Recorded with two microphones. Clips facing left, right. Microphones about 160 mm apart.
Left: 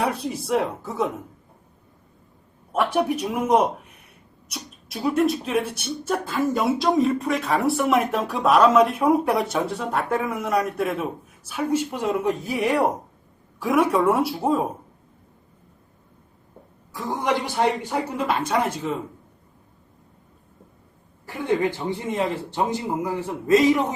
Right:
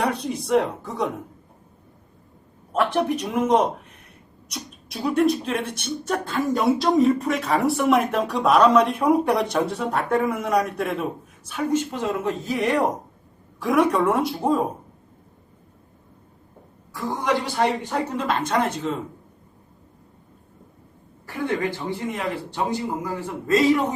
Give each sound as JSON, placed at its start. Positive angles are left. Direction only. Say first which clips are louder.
{"t": 0.0, "sound": "speech", "louder": "right 1 dB", "side_deg": 5}
{"t": 2.7, "sound": "speech", "louder": "even", "side_deg": 5}
{"t": 16.9, "sound": "speech", "louder": "even", "side_deg": 15}
{"t": 17.8, "sound": "speech", "louder": "even", "side_deg": 5}
{"t": 21.2, "sound": "speech", "louder": "left 2 dB", "side_deg": 20}